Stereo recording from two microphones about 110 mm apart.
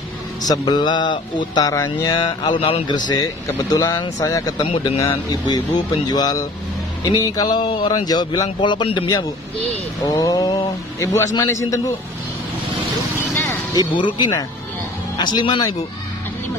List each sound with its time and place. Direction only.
0.4 s a man's voice: 40° left (ahead or behind)
2.1 s speech: 45° left (ahead or behind)
3.1 s a man's voice: 35° left (ahead or behind)
4.6 s speech: 60° left (ahead or behind)
6.0 s a man's voice: 35° left (ahead or behind)
11.4 s a man's voice: 30° left (ahead or behind)
13.3 s vehicle: 25° left (ahead or behind)
13.9 s speech: 45° left (ahead or behind)